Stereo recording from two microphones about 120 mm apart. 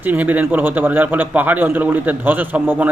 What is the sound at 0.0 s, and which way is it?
Speech, 15° right (ahead or behind).